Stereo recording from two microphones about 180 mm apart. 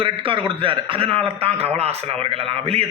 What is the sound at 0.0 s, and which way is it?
A man's voice, 30° right (ahead or behind).